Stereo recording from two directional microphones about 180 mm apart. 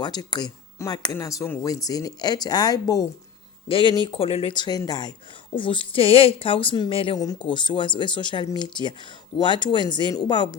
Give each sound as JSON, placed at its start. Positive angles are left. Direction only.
{"t": 0.0, "sound": "a woman's voice", "side_deg": 25}